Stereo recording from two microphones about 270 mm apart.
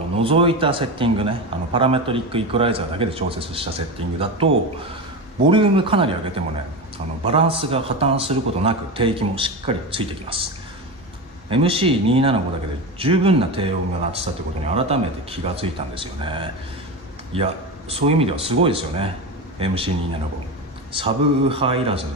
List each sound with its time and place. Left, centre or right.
0.1 s a man's voice: centre
5.5 s a man's voice: centre
11.5 s a man's voice: centre
20.9 s a man's voice: centre